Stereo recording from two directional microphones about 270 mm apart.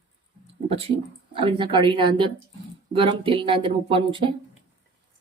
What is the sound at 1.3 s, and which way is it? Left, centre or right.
Speech, centre.